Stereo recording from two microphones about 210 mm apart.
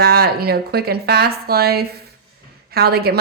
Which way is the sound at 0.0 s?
45° right (ahead or behind).